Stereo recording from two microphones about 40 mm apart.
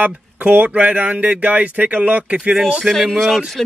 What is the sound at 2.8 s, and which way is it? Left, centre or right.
Speech, centre.